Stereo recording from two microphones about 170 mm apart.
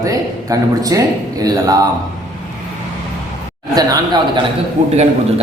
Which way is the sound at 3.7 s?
25° right (ahead or behind).